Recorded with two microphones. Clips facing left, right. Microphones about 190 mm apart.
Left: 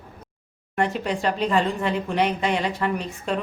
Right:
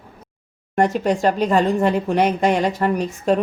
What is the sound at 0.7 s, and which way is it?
A woman's voice, 45° right (ahead or behind).